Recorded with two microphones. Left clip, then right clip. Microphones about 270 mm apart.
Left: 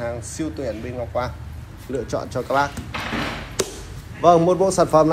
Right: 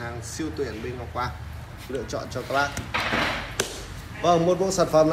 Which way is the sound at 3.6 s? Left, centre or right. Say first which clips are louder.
Left 5 dB; left.